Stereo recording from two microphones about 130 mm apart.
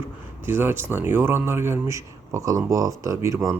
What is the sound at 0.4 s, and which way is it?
Speech, 15° right (ahead or behind).